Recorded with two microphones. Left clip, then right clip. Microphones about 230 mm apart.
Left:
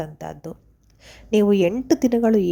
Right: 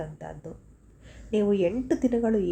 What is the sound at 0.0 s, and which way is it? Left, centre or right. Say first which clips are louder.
A woman's voice: left 6 dB; left.